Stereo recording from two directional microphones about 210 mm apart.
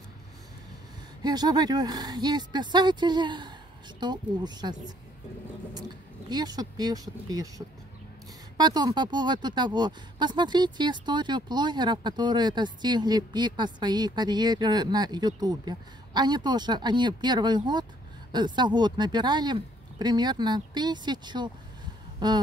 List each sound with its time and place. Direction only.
1.2 s speech: 20° right (ahead or behind)